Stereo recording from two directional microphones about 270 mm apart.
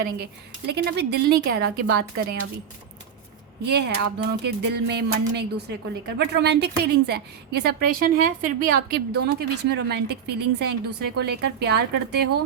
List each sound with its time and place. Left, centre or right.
0.7 s a woman's voice: right
3.7 s a woman's voice: right